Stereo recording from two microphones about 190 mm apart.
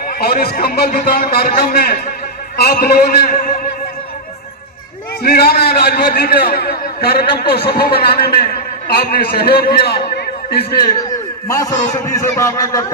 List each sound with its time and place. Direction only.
0.2 s a man's voice: 55° left (ahead or behind)
5.2 s a man's voice: 55° left (ahead or behind)
11.1 s a sound: 15° left (ahead or behind)
12.0 s a man's voice: 15° left (ahead or behind)